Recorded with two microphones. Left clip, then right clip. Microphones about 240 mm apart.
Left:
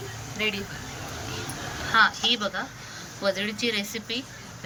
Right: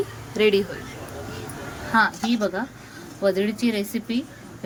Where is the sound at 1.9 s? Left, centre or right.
Right.